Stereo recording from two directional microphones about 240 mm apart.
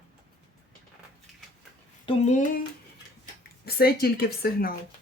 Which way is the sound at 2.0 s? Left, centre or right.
Left.